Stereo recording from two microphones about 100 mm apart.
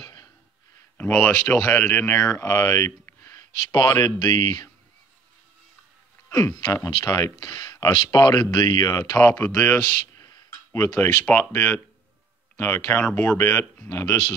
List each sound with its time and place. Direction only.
0.0 s a sound: 40° left (ahead or behind)
1.2 s speech: 25° left (ahead or behind); by 4.6 s 45° left (ahead or behind)
6.2 s speech: 25° left (ahead or behind)
7.3 s speech: 45° left (ahead or behind)
9.3 s speech: 20° left (ahead or behind)
13.0 s speech: 15° left (ahead or behind); by 14.1 s 30° left (ahead or behind)